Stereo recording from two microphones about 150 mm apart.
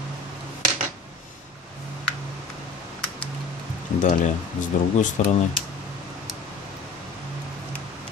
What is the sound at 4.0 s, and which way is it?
Speech, 60° left (ahead or behind).